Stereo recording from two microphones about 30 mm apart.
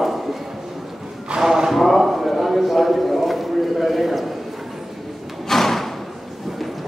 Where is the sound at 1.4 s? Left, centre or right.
Centre.